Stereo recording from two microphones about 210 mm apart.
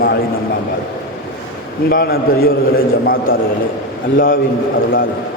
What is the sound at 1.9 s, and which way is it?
A man's voice, 45° left (ahead or behind).